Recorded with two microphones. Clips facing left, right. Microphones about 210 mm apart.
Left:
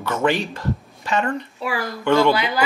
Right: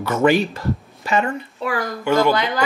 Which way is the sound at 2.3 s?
5° left (ahead or behind).